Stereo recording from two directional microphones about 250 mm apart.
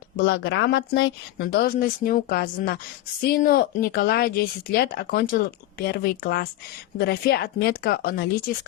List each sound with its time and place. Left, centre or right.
0.2 s speech: left